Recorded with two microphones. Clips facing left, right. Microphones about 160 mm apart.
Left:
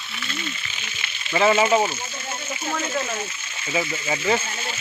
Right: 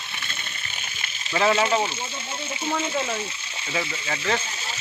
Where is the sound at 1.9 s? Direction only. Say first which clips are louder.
Left 1 dB; 30° right (ahead or behind).